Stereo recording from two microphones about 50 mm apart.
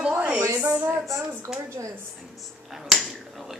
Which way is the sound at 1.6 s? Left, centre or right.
Right.